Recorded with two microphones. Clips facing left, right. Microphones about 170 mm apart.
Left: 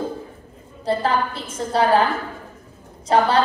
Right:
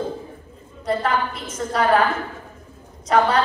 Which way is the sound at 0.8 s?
30° left (ahead or behind).